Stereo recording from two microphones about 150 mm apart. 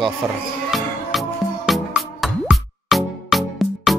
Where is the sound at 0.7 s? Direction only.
Centre (ahead or behind).